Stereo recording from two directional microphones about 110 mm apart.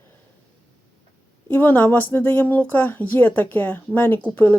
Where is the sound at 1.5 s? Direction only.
15° left (ahead or behind).